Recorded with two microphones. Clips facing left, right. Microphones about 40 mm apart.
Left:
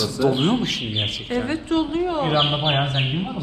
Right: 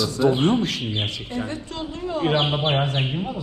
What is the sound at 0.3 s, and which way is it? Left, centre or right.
Speech, left.